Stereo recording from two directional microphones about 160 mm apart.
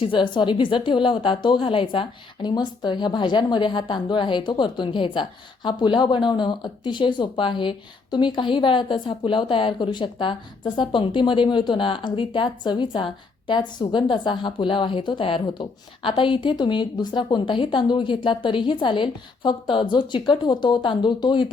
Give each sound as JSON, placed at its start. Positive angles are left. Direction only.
{"t": 0.0, "sound": "a woman's voice", "side_deg": 30}